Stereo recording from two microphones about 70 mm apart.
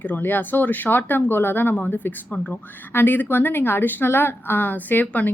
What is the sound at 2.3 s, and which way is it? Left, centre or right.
Speech, centre.